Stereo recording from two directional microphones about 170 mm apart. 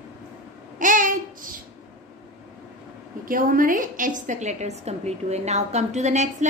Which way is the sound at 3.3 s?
55° right (ahead or behind).